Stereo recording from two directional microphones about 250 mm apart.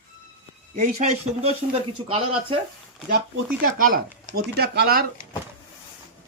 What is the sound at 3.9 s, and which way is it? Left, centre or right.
Speech, right.